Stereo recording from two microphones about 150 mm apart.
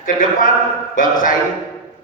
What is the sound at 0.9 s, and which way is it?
Speech, 65° left (ahead or behind).